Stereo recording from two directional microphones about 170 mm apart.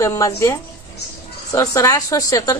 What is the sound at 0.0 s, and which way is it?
Speech, 20° left (ahead or behind).